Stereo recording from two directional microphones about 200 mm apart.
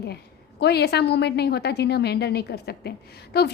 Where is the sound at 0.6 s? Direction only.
55° left (ahead or behind).